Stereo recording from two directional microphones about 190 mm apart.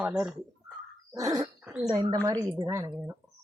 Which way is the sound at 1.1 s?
20° right (ahead or behind).